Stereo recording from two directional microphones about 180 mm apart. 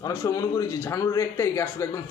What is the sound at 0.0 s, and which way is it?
A man's voice, 20° left (ahead or behind).